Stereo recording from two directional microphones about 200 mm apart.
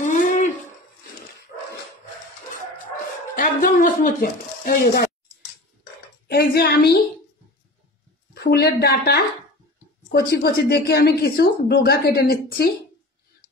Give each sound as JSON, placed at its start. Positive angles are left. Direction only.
{"t": 0.0, "sound": "a sound", "side_deg": 40}
{"t": 3.3, "sound": "speech", "side_deg": 40}
{"t": 8.4, "sound": "speech", "side_deg": 55}